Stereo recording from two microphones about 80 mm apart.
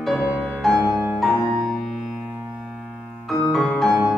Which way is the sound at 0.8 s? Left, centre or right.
Right.